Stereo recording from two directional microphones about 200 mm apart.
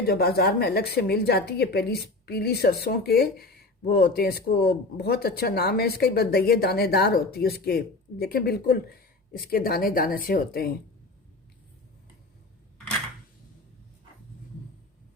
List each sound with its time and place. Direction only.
0.1 s a woman's voice: 50° left (ahead or behind)